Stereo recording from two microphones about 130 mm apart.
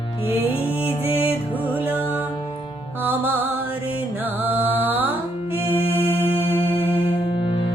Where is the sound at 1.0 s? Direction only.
15° right (ahead or behind).